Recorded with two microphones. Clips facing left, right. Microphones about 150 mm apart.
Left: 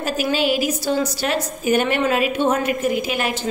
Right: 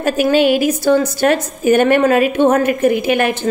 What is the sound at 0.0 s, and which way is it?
A woman's voice, 55° right (ahead or behind).